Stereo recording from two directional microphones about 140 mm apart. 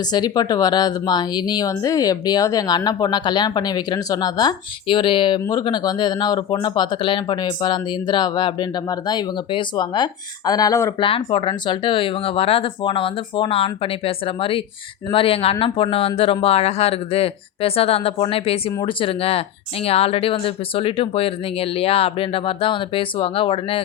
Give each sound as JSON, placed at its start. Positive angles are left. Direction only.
{"t": 0.0, "sound": "speech", "side_deg": 30}
{"t": 10.9, "sound": "speech", "side_deg": 40}